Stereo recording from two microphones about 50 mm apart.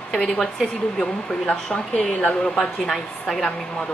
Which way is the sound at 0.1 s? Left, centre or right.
Centre.